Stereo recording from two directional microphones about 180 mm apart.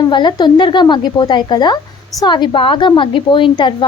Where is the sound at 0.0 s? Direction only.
25° left (ahead or behind).